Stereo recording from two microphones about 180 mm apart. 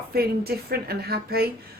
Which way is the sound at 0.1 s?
60° right (ahead or behind).